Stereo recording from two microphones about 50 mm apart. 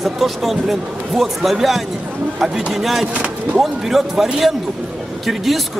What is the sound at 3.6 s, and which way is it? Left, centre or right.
A man's voice, centre.